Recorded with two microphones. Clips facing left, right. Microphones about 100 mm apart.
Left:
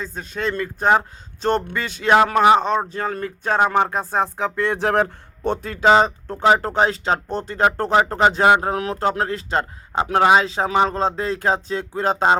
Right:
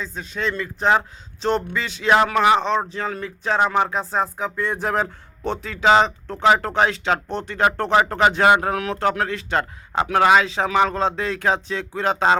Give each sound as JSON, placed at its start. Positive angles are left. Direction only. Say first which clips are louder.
{"t": 0.0, "sound": "speech", "louder": "left 1 dB", "side_deg": 45}
{"t": 4.4, "sound": "speech", "louder": "left 3 dB", "side_deg": 80}
{"t": 5.5, "sound": "speech", "louder": "left 1 dB", "side_deg": 45}